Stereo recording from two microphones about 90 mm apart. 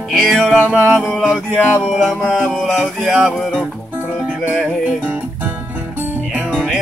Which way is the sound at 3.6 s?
20° right (ahead or behind).